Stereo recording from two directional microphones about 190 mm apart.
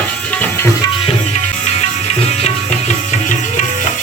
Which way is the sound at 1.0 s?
35° left (ahead or behind).